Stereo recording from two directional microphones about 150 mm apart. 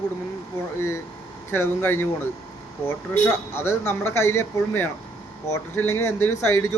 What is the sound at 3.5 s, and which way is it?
A man's voice, 15° left (ahead or behind).